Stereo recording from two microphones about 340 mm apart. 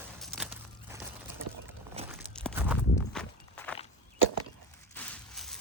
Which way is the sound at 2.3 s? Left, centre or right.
Centre.